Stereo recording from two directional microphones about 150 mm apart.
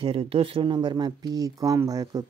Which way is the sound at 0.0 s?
40° right (ahead or behind).